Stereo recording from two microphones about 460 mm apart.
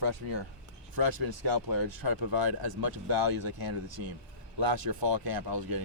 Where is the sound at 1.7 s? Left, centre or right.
Right.